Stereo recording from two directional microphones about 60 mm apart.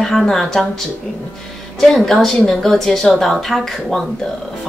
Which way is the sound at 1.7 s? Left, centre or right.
Centre.